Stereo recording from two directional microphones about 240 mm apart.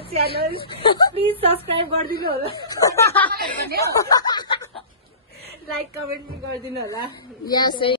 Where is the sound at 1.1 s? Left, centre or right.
Right.